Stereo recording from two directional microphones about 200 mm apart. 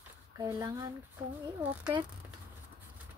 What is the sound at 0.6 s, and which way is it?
Speech, 20° right (ahead or behind).